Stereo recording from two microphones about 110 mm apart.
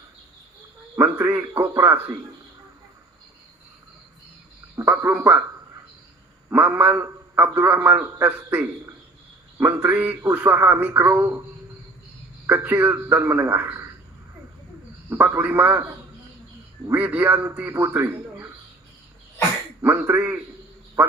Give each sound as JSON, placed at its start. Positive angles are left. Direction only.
{"t": 0.9, "sound": "speech", "side_deg": -20}
{"t": 4.7, "sound": "speech", "side_deg": -25}
{"t": 6.5, "sound": "a man's voice", "side_deg": -15}
{"t": 12.5, "sound": "a man's voice", "side_deg": -20}
{"t": 15.1, "sound": "a man's voice", "side_deg": -20}
{"t": 16.9, "sound": "a man's voice", "side_deg": -15}
{"t": 19.8, "sound": "a sound", "side_deg": -20}